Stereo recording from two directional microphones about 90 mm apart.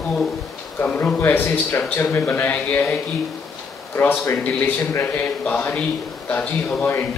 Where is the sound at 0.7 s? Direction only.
15° left (ahead or behind).